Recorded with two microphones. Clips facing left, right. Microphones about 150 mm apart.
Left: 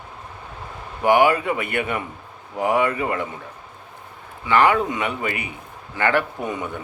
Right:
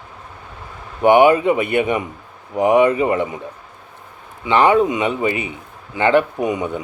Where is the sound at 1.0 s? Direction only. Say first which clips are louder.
Right 5 dB; 20° right (ahead or behind).